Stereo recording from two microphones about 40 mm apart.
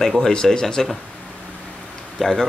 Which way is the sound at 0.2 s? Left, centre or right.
Centre.